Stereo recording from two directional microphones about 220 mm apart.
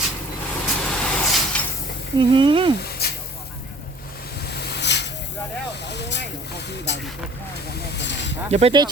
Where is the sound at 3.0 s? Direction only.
45° left (ahead or behind).